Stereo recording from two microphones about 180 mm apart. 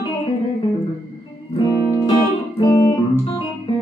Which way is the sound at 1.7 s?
20° left (ahead or behind).